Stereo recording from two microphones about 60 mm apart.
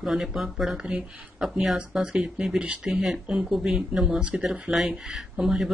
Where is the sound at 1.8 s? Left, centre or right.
Centre.